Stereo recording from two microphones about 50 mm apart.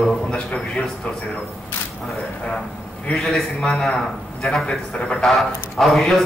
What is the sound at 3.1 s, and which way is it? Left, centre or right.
Speech, left.